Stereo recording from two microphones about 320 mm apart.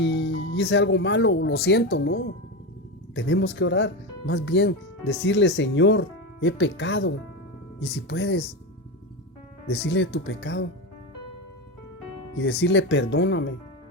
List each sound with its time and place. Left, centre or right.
0.0 s speech: left
9.6 s speech: left
12.4 s speech: left